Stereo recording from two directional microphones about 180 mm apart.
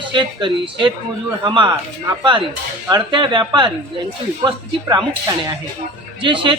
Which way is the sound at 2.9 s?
25° right (ahead or behind).